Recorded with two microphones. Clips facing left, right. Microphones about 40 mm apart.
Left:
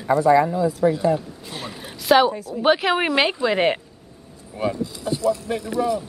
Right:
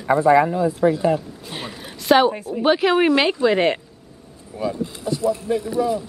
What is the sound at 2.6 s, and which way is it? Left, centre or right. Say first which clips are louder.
Speech: right 2 dB; centre.